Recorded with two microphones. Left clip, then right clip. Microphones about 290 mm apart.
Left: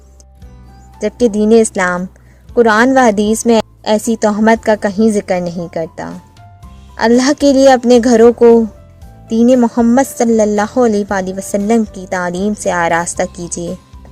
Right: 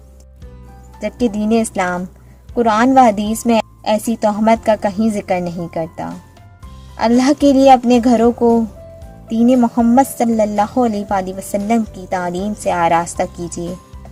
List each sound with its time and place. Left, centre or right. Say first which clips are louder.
0.9 s a woman's voice: left 6 dB; left